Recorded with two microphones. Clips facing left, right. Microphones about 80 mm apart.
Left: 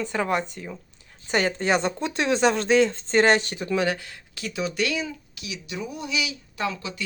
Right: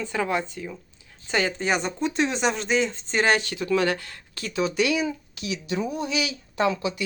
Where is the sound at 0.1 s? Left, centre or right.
Left.